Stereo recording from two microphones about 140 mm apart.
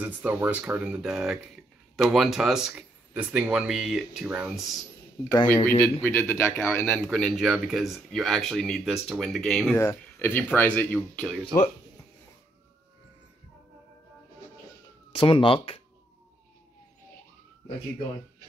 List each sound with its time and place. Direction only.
0.0 s speech: 10° right (ahead or behind)
5.5 s speech: 15° left (ahead or behind)
6.9 s speech: 5° left (ahead or behind)
9.8 s speech: 15° left (ahead or behind)
15.1 s speech: 40° left (ahead or behind)